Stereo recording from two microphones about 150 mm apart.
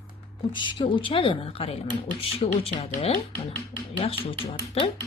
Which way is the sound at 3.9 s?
40° left (ahead or behind).